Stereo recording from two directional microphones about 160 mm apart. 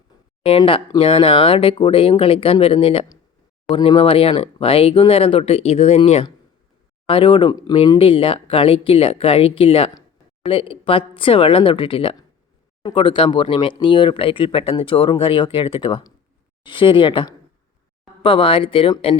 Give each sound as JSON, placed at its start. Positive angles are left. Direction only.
{"t": 0.4, "sound": "speech", "side_deg": 35}